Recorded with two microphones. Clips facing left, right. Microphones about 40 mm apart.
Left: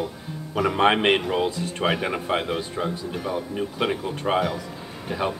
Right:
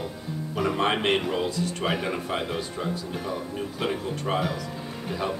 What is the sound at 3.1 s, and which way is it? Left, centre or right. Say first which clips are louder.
Speech: left 3 dB; centre.